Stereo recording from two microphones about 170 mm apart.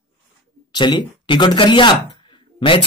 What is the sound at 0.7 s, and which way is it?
Speech, 25° left (ahead or behind).